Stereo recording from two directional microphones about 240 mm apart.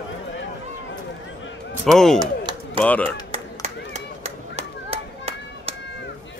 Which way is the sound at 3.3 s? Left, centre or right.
Right.